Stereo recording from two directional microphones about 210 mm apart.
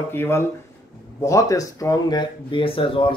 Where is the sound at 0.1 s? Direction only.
10° left (ahead or behind).